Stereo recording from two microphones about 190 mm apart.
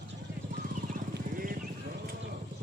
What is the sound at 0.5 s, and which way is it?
Vehicle, 55° right (ahead or behind).